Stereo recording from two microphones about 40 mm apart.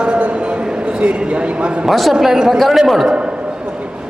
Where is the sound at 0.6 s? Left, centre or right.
Right.